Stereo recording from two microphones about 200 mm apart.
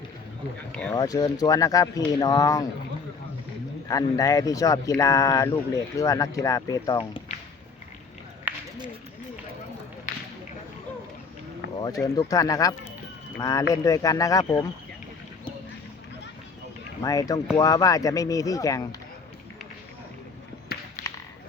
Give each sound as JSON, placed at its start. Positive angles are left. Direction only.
{"t": 0.7, "sound": "speech", "side_deg": 5}
{"t": 0.9, "sound": "speech", "side_deg": 20}
{"t": 3.8, "sound": "speech", "side_deg": 15}
{"t": 8.5, "sound": "a sound", "side_deg": -10}
{"t": 10.1, "sound": "a sound", "side_deg": 40}
{"t": 11.8, "sound": "speech", "side_deg": 20}
{"t": 17.0, "sound": "speech", "side_deg": 15}
{"t": 21.0, "sound": "tap", "side_deg": 40}